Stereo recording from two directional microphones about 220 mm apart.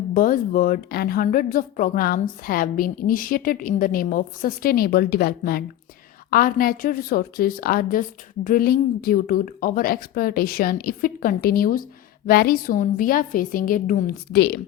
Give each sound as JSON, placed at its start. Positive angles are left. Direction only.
{"t": 0.1, "sound": "a woman's voice", "side_deg": 40}